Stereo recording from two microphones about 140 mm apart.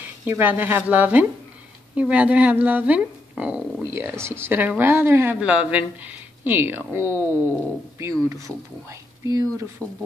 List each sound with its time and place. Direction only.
0.2 s speech: 10° right (ahead or behind)